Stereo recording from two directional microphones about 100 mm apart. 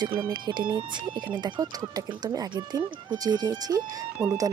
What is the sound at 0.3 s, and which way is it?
Speech, 50° right (ahead or behind).